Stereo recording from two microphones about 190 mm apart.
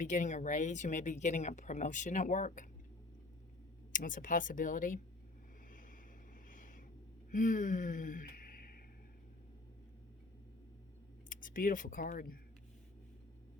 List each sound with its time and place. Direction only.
0.0 s speech: 40° left (ahead or behind)
3.9 s speech: 45° left (ahead or behind)
6.5 s a sound: 45° left (ahead or behind)
11.3 s speech: 45° left (ahead or behind)